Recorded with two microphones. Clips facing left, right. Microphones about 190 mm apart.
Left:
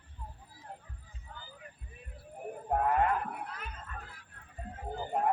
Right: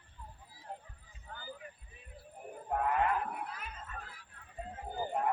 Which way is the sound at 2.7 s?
45° left (ahead or behind).